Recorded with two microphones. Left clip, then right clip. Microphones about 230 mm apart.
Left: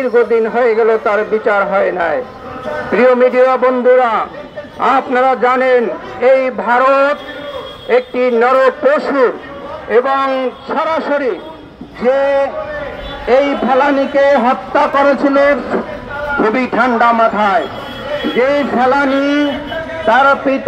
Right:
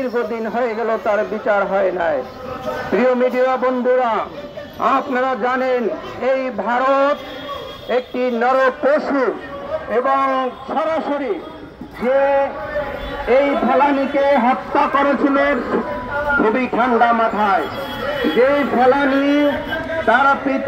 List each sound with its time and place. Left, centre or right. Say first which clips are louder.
0.0 s a man's voice: left 9 dB; left
20.1 s a man's voice: left 5 dB; left